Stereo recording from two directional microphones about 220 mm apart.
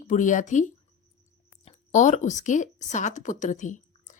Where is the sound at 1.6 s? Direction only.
35° left (ahead or behind).